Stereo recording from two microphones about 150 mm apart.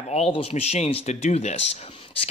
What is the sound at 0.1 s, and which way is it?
Speech, 40° left (ahead or behind).